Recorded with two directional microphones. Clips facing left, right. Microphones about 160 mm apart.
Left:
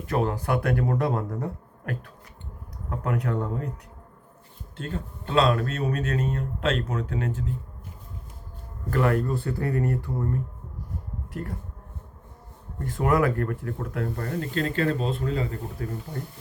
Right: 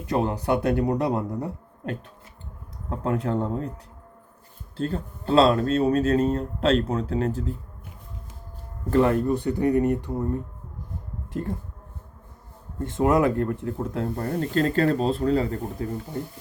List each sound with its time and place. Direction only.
0.0 s speech: 20° right (ahead or behind)
4.8 s speech: 35° right (ahead or behind)
8.9 s speech: 25° right (ahead or behind)
12.8 s speech: 25° right (ahead or behind)
15.8 s speech: 25° right (ahead or behind)